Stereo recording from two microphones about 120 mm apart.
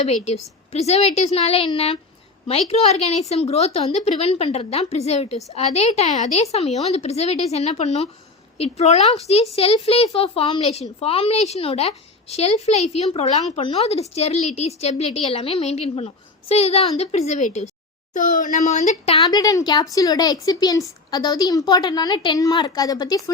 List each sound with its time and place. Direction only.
0.0 s speech: 65° left (ahead or behind)
14.1 s a woman's voice: 65° left (ahead or behind)
19.3 s speech: 30° left (ahead or behind)